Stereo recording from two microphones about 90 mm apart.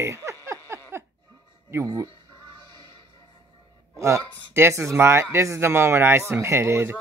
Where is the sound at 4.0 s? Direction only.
35° right (ahead or behind).